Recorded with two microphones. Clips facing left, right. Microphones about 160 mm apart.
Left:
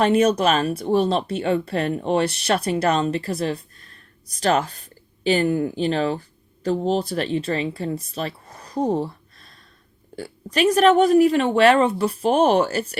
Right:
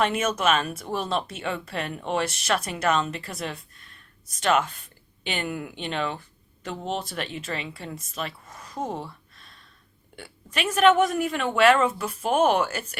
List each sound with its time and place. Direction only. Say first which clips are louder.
0.0 s speech: left 7 dB; 35° left (ahead or behind)